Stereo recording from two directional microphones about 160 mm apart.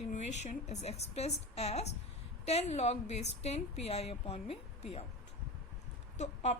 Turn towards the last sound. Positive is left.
turn(degrees=45)  # may be behind; listen again after turning